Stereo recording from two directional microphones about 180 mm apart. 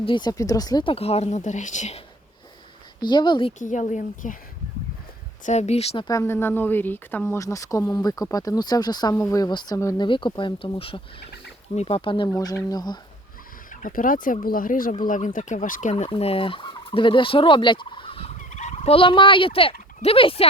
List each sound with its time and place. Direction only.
0.0 s speech: 25° left (ahead or behind); by 2.0 s 40° left (ahead or behind)
3.0 s fowl: 25° left (ahead or behind)
3.6 s a woman's voice: 45° left (ahead or behind)
5.5 s speech: 40° left (ahead or behind)
6.1 s fowl: 15° left (ahead or behind)
11.7 s speech: 35° left (ahead or behind)
12.3 s fowl: 20° left (ahead or behind)
13.8 s a woman's voice: 50° left (ahead or behind)
15.0 s fowl: 45° left (ahead or behind); by 18.3 s 30° left (ahead or behind)
18.3 s fowl: 40° left (ahead or behind)
20.0 s speech: 30° left (ahead or behind)